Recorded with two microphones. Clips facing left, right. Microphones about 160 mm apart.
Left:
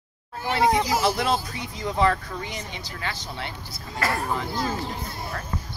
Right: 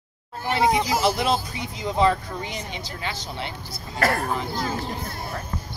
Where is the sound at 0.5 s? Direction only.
15° right (ahead or behind).